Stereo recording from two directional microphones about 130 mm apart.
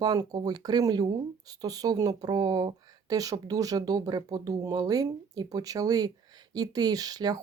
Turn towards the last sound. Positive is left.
turn(degrees=-30)  # may be behind; listen again after turning